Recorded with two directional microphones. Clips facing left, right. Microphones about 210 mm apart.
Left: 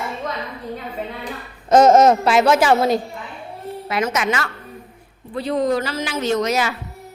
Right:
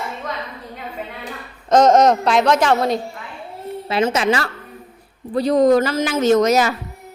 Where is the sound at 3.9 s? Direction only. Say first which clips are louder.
Right 4 dB; 30° right (ahead or behind).